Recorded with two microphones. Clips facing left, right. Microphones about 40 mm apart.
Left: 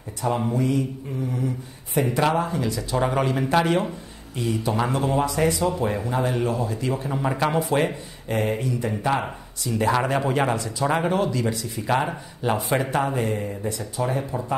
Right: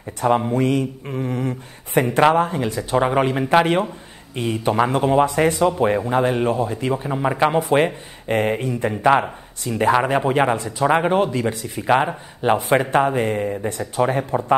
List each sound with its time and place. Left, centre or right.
0.5 s mantra: right
2.0 s speech: right